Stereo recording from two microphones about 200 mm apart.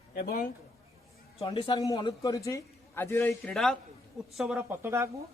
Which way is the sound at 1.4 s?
25° left (ahead or behind).